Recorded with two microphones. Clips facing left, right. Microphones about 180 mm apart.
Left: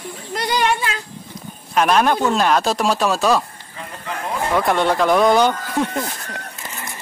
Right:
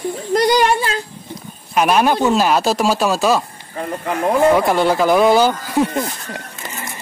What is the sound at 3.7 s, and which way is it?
Speech, 50° right (ahead or behind).